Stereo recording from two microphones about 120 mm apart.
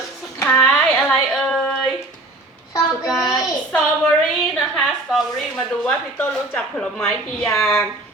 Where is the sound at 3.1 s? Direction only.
Centre (ahead or behind).